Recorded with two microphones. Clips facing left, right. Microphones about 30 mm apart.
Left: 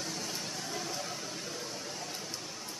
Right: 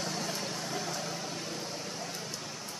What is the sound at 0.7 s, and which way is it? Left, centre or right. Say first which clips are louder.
Vehicle: right 1 dB; centre.